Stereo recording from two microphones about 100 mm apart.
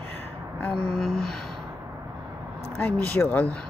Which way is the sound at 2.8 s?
20° left (ahead or behind).